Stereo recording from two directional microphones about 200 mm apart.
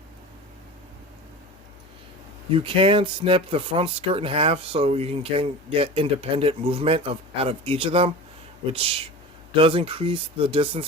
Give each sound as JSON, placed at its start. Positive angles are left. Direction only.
{"t": 2.5, "sound": "speech", "side_deg": -25}